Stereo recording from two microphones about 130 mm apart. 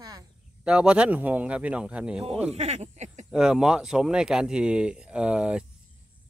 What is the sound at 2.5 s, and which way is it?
Speech, 60° right (ahead or behind).